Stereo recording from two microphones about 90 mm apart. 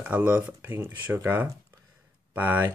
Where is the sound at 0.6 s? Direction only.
30° right (ahead or behind).